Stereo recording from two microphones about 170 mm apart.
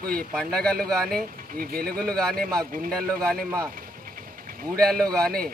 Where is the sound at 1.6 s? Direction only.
60° right (ahead or behind).